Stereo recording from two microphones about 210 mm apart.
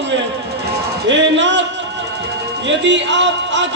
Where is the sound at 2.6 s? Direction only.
60° right (ahead or behind).